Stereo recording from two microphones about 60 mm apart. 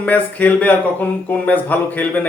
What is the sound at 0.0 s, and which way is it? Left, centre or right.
A man's voice, left.